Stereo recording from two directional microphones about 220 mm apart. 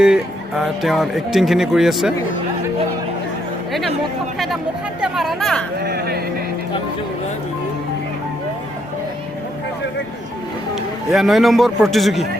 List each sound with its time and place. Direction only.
0.0 s speech: 5° right (ahead or behind)
4.9 s speech: centre (ahead or behind)
5.8 s speech: 45° right (ahead or behind)
11.1 s speech: centre (ahead or behind)